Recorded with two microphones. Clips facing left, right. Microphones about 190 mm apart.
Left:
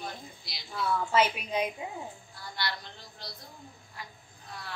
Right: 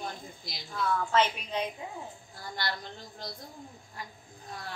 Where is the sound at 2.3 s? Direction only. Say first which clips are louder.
Right 2 dB; 45° right (ahead or behind).